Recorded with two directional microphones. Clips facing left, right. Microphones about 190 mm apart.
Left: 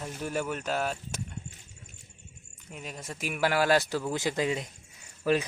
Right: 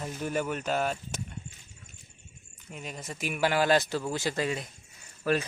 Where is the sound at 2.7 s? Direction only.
Centre (ahead or behind).